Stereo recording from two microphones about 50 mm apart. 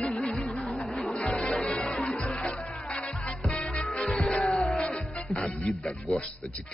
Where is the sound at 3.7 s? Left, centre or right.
Left.